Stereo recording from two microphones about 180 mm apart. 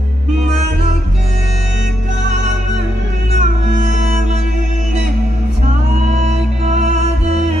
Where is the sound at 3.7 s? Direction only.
45° right (ahead or behind).